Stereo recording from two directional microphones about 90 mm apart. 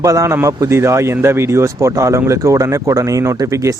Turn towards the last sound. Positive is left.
turn(degrees=-35)  # may be behind; listen again after turning